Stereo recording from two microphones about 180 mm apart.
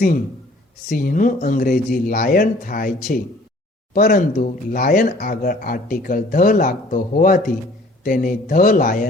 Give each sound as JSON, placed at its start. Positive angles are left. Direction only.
{"t": 0.9, "sound": "speech", "side_deg": 50}